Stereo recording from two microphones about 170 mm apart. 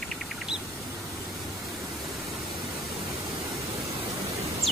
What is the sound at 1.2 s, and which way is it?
Pink noise, centre (ahead or behind).